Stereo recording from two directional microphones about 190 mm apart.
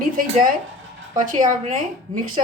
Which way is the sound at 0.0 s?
45° right (ahead or behind).